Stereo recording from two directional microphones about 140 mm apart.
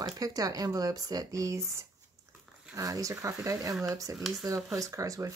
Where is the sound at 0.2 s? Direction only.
25° right (ahead or behind).